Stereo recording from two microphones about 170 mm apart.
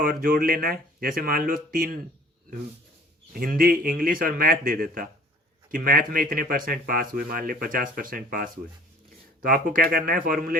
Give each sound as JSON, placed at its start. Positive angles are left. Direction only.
{"t": 0.0, "sound": "speech", "side_deg": -55}
{"t": 3.3, "sound": "speech", "side_deg": -60}